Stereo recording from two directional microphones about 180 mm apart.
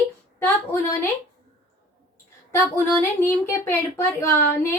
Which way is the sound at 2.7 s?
15° left (ahead or behind).